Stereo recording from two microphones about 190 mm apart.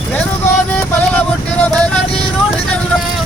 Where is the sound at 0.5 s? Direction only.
10° left (ahead or behind).